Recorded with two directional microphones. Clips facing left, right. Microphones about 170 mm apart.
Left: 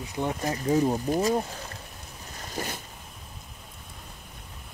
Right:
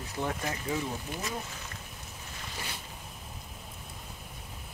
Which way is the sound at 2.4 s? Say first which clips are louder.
Left 8 dB; 45° left (ahead or behind).